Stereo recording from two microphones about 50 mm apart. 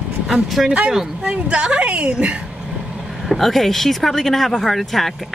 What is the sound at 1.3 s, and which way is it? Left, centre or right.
Speech, right.